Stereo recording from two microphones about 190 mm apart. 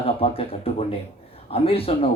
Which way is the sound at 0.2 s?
30° left (ahead or behind).